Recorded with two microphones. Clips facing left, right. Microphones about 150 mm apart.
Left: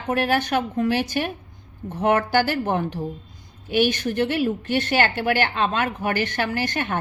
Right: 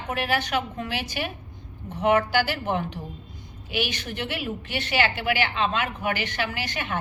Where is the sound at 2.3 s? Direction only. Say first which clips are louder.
Left 4 dB; 50° left (ahead or behind).